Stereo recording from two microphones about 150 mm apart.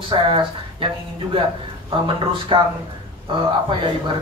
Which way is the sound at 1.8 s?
35° right (ahead or behind).